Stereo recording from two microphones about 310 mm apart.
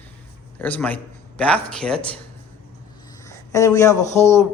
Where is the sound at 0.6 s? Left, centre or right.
Centre.